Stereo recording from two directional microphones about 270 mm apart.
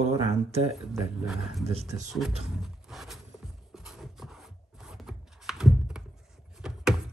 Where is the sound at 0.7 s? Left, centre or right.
Centre.